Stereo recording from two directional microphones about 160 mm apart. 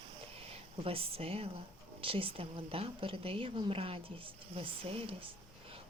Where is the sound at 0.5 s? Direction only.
35° right (ahead or behind).